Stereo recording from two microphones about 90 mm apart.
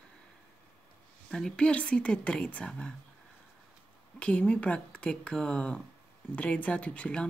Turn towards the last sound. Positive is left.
turn(degrees=10)  # may be behind; listen again after turning